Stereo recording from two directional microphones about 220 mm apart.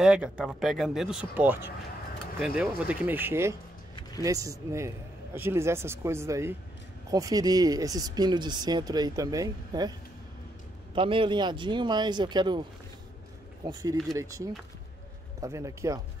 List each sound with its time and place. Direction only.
0.0 s speech: 5° right (ahead or behind)
11.0 s speech: 25° right (ahead or behind)
15.4 s speech: 15° right (ahead or behind)